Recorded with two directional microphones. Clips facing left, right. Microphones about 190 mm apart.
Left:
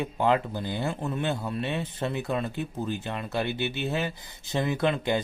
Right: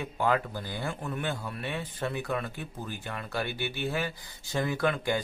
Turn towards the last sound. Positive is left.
turn(degrees=20)  # may be behind; listen again after turning